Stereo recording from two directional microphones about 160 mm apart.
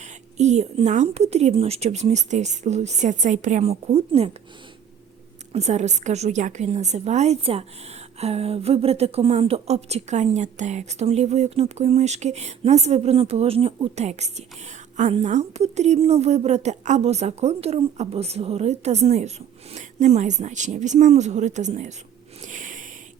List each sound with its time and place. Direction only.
0.0 s a woman's voice: 45° right (ahead or behind)
5.5 s a woman's voice: 45° right (ahead or behind)
22.4 s a sound: 50° right (ahead or behind)